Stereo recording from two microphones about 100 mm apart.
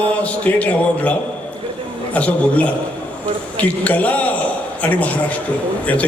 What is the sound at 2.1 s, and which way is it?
A man's voice, 15° left (ahead or behind).